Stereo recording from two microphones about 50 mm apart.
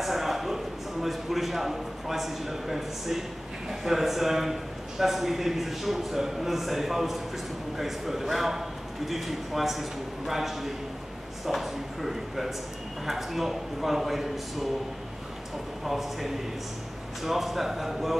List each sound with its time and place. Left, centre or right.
0.0 s a sound: centre
1.0 s a man's voice: centre
15.8 s a man's voice: centre